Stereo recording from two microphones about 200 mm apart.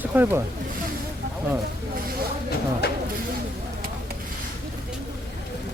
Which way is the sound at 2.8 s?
50° left (ahead or behind).